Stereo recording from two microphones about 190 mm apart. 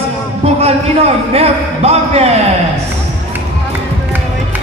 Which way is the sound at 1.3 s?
35° right (ahead or behind).